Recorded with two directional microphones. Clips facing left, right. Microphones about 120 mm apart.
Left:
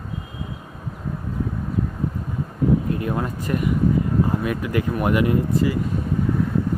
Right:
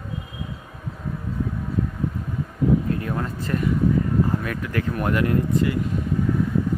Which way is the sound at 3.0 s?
15° left (ahead or behind).